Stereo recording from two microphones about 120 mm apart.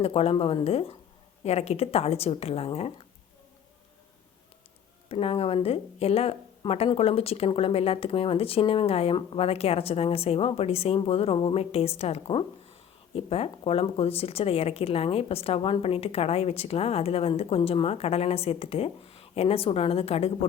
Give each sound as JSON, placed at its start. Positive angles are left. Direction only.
{"t": 0.0, "sound": "speech", "side_deg": 55}
{"t": 5.0, "sound": "speech", "side_deg": 50}